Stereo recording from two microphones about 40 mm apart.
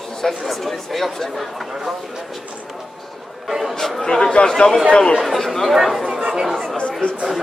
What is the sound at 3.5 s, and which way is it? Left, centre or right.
Speech, centre.